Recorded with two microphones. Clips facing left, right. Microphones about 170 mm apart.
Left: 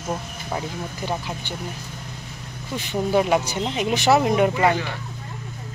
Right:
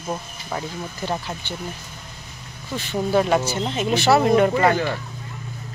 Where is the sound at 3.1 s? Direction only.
10° left (ahead or behind).